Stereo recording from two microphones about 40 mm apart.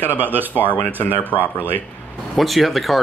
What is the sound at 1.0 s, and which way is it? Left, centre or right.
Speech, left.